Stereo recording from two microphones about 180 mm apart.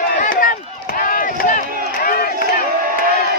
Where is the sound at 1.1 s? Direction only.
50° left (ahead or behind).